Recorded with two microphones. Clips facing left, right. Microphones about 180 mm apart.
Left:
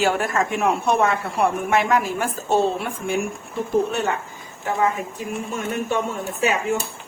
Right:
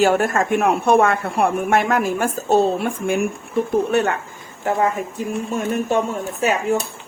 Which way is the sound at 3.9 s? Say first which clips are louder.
Right 5 dB; 60° right (ahead or behind).